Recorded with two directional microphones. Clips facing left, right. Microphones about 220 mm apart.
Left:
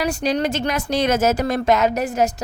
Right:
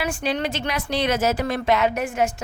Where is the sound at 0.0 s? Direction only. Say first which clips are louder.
Left 4 dB; 40° left (ahead or behind).